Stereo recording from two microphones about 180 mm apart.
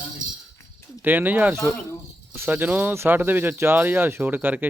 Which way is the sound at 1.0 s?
10° right (ahead or behind).